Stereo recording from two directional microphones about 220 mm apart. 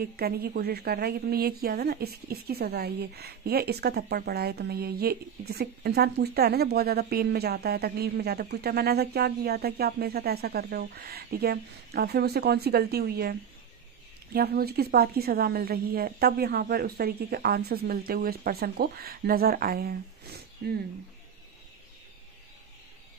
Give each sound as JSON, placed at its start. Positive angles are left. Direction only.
{"t": 0.0, "sound": "a woman's voice", "side_deg": -45}